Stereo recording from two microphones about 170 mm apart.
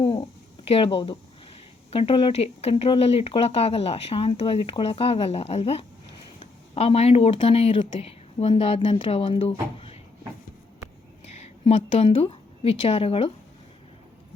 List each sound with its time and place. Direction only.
0.0 s a sound: 30° left (ahead or behind)
1.9 s speech: 35° left (ahead or behind)
11.3 s a woman's voice: 35° left (ahead or behind)